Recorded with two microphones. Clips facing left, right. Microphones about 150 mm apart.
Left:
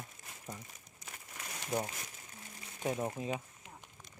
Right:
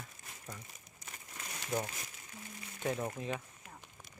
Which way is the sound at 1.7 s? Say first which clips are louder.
Left 1 dB; 15° left (ahead or behind).